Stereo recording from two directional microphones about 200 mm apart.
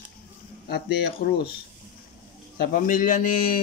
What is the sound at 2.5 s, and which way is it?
A man's voice, 40° left (ahead or behind).